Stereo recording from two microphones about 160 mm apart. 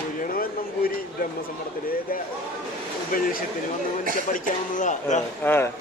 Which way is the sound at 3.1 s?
60° left (ahead or behind).